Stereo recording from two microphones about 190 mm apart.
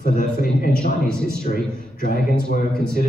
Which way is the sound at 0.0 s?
50° left (ahead or behind).